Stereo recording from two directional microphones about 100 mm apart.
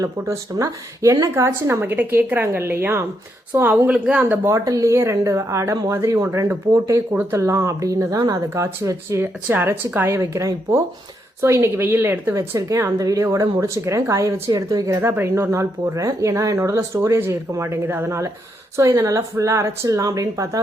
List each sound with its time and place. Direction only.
0.0 s speech: 35° right (ahead or behind); by 4.4 s 15° right (ahead or behind)
4.4 s speech: 30° right (ahead or behind)
7.1 s speech: 20° right (ahead or behind)
7.3 s speech: 30° right (ahead or behind)
15.0 s speech: 25° right (ahead or behind)